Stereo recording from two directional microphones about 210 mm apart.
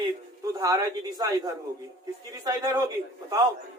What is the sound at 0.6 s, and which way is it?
Speech, 20° right (ahead or behind).